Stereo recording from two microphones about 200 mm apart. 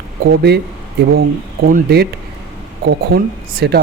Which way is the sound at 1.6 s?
50° right (ahead or behind).